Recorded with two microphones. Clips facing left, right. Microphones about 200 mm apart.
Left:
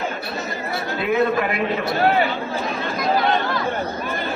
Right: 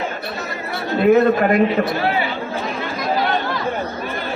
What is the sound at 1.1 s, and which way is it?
Speech, 40° right (ahead or behind).